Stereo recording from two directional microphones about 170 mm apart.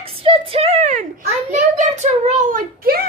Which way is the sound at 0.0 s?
35° right (ahead or behind).